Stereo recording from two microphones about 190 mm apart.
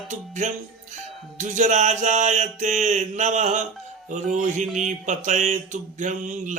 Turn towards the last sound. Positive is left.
turn(degrees=-40)  # may be behind; listen again after turning